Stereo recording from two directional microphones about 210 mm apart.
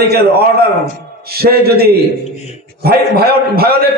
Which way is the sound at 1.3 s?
45° right (ahead or behind).